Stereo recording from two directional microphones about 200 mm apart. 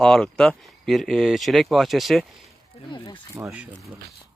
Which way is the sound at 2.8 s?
25° left (ahead or behind).